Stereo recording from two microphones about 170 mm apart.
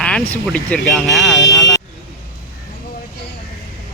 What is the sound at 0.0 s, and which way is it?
Speech, 5° left (ahead or behind).